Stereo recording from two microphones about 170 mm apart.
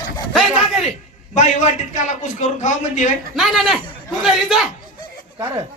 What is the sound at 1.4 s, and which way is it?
A man's voice, 45° left (ahead or behind).